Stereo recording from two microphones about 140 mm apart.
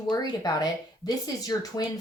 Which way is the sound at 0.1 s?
30° left (ahead or behind).